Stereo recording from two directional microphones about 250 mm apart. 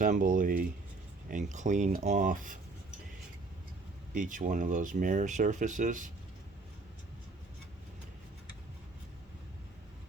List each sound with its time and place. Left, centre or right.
0.0 s speech: right
4.1 s speech: right